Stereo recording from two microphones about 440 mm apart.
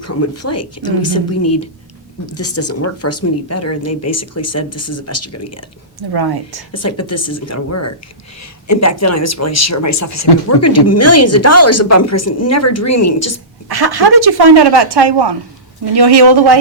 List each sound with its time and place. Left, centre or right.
0.0 s speech: left
6.0 s speech: right
6.7 s speech: left
13.7 s speech: right